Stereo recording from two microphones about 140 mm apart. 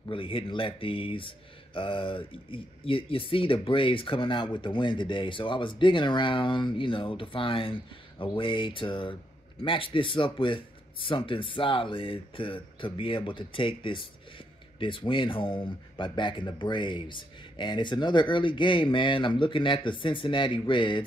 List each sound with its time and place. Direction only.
0.1 s speech: 40° left (ahead or behind)